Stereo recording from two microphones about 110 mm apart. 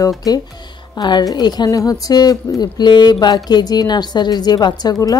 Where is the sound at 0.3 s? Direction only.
35° left (ahead or behind).